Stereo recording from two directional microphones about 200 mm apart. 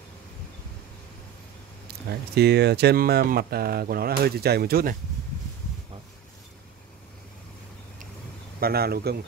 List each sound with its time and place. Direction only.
2.0 s speech: 55° right (ahead or behind)
8.5 s speech: 50° right (ahead or behind)